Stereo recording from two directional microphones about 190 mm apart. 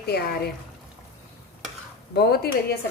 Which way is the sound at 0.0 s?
55° left (ahead or behind).